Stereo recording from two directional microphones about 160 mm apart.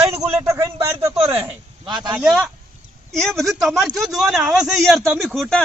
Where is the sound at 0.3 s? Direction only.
15° right (ahead or behind).